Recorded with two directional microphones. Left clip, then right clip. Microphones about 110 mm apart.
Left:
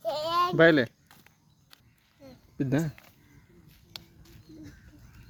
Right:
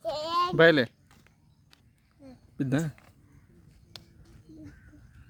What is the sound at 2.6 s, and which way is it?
Speech, 40° right (ahead or behind).